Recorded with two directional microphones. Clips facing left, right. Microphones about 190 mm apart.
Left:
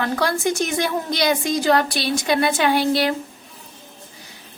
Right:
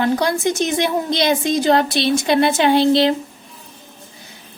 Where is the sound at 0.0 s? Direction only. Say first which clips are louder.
Right 4 dB; 20° right (ahead or behind).